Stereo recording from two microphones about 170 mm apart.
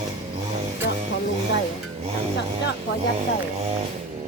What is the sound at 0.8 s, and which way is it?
Music, 80° left.